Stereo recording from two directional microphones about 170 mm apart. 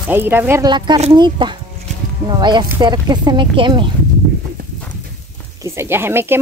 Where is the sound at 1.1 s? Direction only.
25° right (ahead or behind).